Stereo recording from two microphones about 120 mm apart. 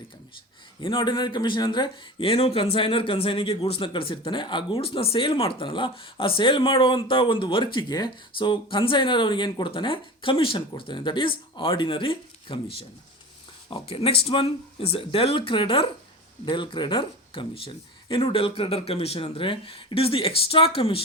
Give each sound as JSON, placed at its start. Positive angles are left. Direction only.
{"t": 0.8, "sound": "speech", "side_deg": 45}